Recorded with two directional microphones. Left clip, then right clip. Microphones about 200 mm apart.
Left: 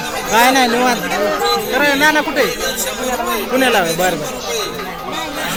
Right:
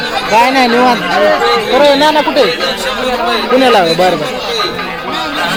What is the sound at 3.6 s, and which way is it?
Speech, 20° right (ahead or behind).